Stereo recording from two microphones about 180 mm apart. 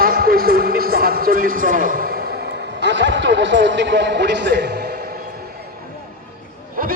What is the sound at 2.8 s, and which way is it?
A man's voice, 75° right (ahead or behind).